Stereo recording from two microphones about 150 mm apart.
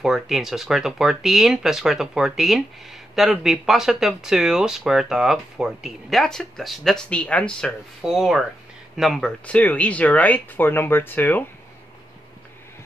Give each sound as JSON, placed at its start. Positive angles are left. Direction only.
{"t": 0.0, "sound": "speech", "side_deg": 0}